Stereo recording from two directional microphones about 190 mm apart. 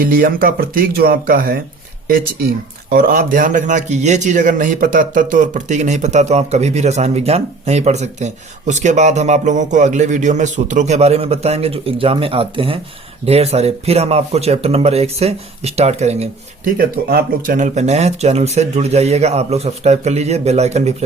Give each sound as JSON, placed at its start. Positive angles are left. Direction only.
{"t": 0.0, "sound": "speech", "side_deg": -50}
{"t": 2.9, "sound": "a man's voice", "side_deg": -50}
{"t": 16.7, "sound": "a man's voice", "side_deg": -50}